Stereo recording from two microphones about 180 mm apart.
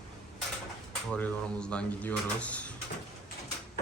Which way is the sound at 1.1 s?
5° left (ahead or behind).